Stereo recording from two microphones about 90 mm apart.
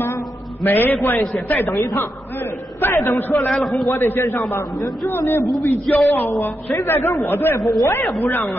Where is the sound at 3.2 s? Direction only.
20° left (ahead or behind).